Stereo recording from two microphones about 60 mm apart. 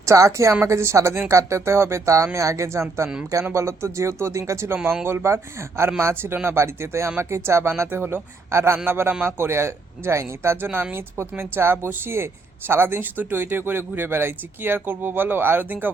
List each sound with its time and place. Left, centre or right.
0.0 s speech: right
6.3 s speech: right
6.6 s speech: right